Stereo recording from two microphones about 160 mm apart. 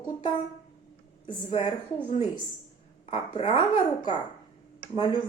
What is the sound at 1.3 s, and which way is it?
Speech, 30° left (ahead or behind).